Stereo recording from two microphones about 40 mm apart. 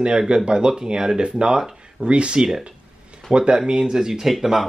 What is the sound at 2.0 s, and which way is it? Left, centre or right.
Speech, right.